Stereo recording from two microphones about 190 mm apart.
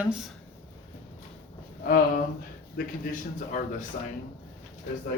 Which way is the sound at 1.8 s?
50° left (ahead or behind).